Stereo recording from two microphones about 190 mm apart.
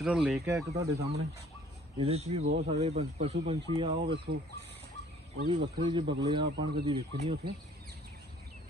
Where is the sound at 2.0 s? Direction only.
35° right (ahead or behind).